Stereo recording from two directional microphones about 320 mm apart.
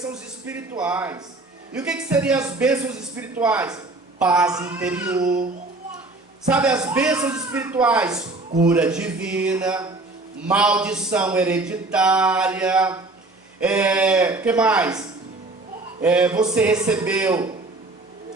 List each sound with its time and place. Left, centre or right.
0.0 s a man's voice: centre
5.2 s a sound: right
6.5 s a man's voice: centre